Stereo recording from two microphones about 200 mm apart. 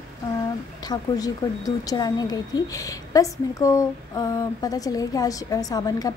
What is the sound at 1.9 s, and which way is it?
A woman's voice, 20° left (ahead or behind).